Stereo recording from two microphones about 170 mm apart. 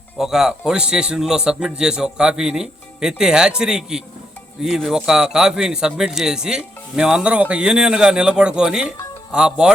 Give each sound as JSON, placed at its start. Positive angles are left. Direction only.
{"t": 0.2, "sound": "speech", "side_deg": -5}